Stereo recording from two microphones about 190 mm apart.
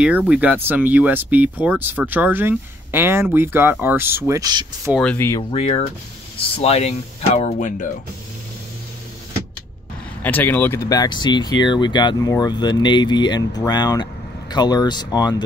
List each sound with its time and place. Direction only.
0.3 s speech: 5° right (ahead or behind)
4.9 s speech: 10° left (ahead or behind)
5.5 s speech: 30° left (ahead or behind)
10.2 s speech: 10° left (ahead or behind)